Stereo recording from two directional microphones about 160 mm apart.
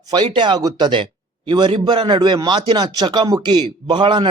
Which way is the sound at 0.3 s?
30° right (ahead or behind).